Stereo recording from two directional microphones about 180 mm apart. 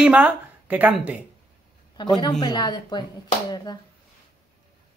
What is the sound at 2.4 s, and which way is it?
A woman's voice, 25° left (ahead or behind).